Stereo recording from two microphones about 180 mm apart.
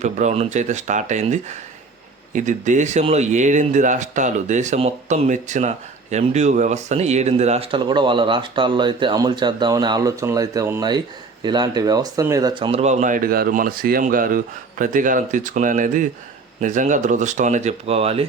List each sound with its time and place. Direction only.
0.0 s speech: 40° right (ahead or behind)
12.8 s speech: 40° right (ahead or behind)